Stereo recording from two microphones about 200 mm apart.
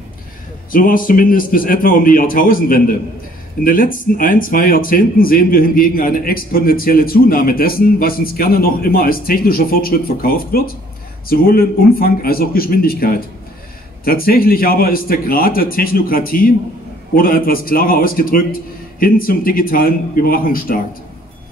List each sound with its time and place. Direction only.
0.7 s speech: 45° left (ahead or behind)